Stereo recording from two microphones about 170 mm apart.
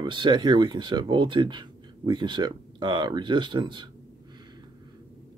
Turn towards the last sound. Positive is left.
turn(degrees=-30)  # may be behind; listen again after turning